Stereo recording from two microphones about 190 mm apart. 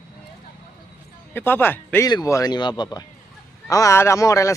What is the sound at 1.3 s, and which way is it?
Speech, 10° left (ahead or behind).